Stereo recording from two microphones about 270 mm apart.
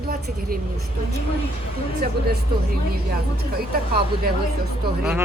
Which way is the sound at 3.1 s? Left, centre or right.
Right.